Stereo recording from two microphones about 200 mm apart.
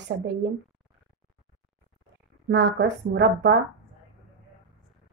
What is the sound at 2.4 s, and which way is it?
Speech, 55° right (ahead or behind).